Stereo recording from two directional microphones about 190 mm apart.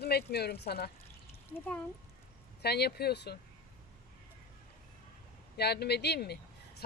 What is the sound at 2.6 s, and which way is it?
Speech, 60° left (ahead or behind).